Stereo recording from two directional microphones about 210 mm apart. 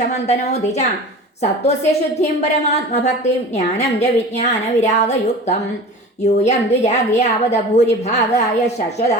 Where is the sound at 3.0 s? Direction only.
35° left (ahead or behind).